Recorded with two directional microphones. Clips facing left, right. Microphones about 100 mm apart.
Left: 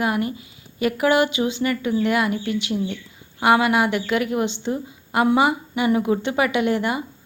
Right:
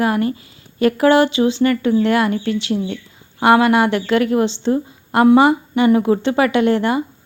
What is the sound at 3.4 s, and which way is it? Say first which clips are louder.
Speech: right 5 dB; 30° right (ahead or behind).